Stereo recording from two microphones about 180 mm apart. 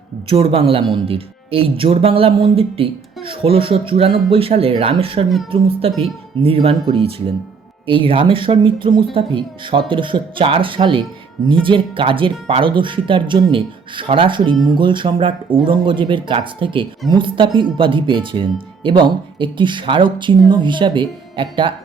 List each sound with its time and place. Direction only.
0.3 s speech: 30° right (ahead or behind)